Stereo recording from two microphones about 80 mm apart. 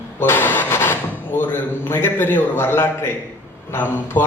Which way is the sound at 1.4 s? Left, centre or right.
Left.